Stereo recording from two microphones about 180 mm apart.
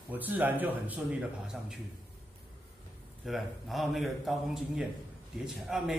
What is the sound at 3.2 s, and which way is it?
A man's voice, centre (ahead or behind).